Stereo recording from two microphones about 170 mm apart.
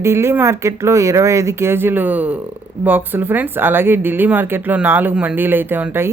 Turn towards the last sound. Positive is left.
turn(degrees=-10)  # may be behind; listen again after turning